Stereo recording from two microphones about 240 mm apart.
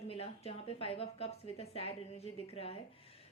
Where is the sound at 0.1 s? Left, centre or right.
Left.